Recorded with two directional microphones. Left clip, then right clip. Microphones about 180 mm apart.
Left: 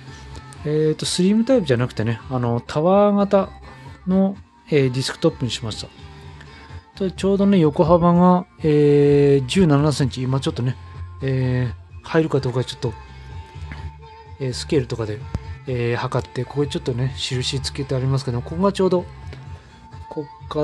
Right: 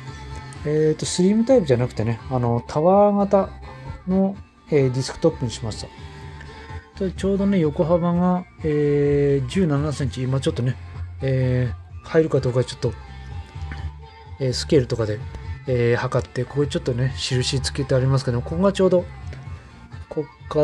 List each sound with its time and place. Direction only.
0.7 s speech: 20° left (ahead or behind)
7.0 s speech: 30° left (ahead or behind)
10.1 s speech: 20° left (ahead or behind)
14.4 s speech: 5° left (ahead or behind)
20.5 s speech: 5° left (ahead or behind)